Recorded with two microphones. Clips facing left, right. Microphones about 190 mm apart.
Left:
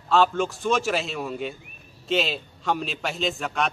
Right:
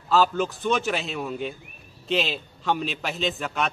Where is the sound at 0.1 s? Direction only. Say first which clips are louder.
Even; centre (ahead or behind).